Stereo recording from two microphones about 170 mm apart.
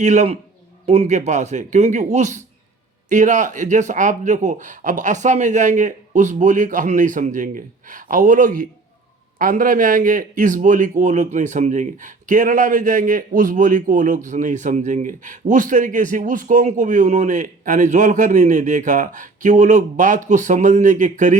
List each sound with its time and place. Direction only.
0.0 s speech: 40° right (ahead or behind)